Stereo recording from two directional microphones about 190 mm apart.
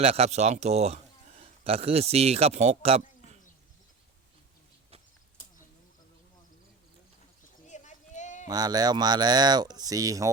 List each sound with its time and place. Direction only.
0.0 s a man's voice: 35° right (ahead or behind)
7.7 s a sound: 40° left (ahead or behind)
8.4 s speech: 20° right (ahead or behind)